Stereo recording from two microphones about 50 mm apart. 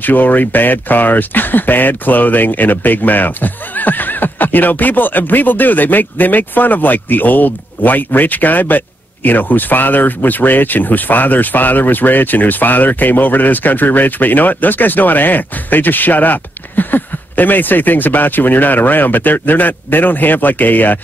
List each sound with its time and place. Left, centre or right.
0.0 s speech: left